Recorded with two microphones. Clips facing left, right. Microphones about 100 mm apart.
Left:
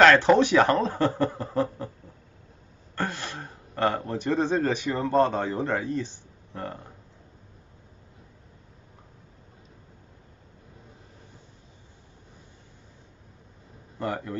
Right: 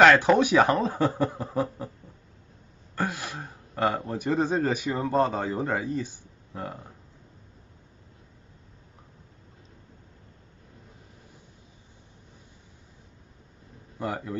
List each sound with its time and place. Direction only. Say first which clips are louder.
0.0 s speech: left 1 dB; 10° right (ahead or behind)
3.0 s speech: right 1 dB; 10° right (ahead or behind)
13.9 s speech: left 1 dB; 10° right (ahead or behind)